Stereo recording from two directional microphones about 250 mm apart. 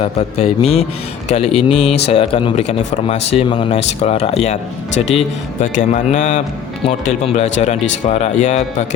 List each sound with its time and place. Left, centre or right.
0.0 s speech: left